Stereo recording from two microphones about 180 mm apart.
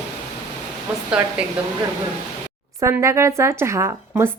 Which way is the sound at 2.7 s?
15° right (ahead or behind).